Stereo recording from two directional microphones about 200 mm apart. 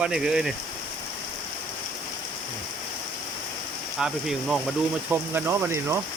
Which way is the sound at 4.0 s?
Centre (ahead or behind).